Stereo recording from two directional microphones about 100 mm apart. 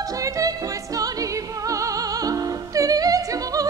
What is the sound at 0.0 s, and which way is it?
Music, 35° right (ahead or behind).